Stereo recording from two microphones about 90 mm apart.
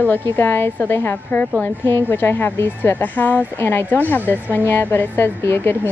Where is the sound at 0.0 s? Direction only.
20° left (ahead or behind).